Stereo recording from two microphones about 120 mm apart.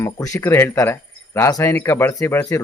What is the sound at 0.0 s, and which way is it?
Speech, 25° left (ahead or behind).